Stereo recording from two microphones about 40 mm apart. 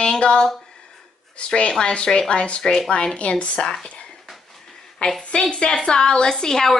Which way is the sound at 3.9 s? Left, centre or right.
Left.